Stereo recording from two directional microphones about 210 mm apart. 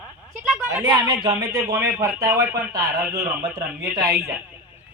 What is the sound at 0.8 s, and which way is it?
A man's voice, 20° right (ahead or behind).